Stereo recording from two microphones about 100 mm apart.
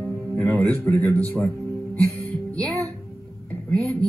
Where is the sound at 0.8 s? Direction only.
25° left (ahead or behind).